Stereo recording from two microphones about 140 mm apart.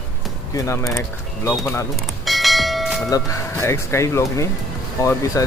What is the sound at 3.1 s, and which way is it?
Speech, 20° left (ahead or behind).